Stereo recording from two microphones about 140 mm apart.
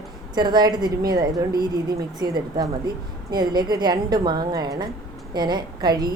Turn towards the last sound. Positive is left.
turn(degrees=-30)  # may be behind; listen again after turning